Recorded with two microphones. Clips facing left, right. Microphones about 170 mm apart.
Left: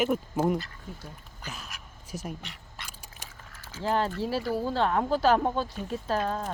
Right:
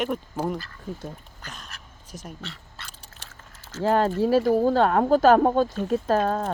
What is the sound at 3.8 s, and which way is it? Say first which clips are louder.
Speech: right 7 dB; 50° right (ahead or behind).